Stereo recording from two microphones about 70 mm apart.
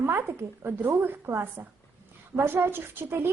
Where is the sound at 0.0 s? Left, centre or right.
Right.